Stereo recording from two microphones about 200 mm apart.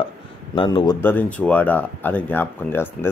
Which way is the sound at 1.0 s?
10° left (ahead or behind).